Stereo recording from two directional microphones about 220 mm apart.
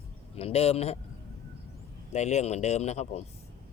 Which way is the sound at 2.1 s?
30° left (ahead or behind).